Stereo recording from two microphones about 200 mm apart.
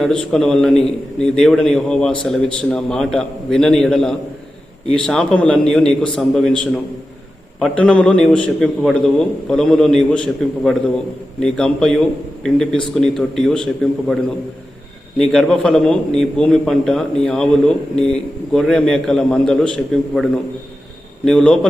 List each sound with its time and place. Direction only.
0.0 s a man's voice: 5° left (ahead or behind)
7.6 s a man's voice: 5° left (ahead or behind)
15.2 s a man's voice: 5° left (ahead or behind)
21.2 s a man's voice: 5° left (ahead or behind)